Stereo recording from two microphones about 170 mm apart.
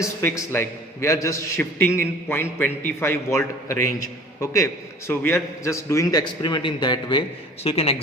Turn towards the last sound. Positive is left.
turn(degrees=35)  # may be behind; listen again after turning